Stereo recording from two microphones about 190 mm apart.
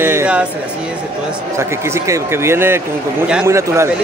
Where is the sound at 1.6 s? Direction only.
15° right (ahead or behind).